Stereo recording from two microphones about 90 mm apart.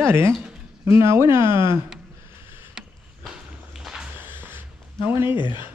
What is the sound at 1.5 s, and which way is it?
Speech, 65° left (ahead or behind).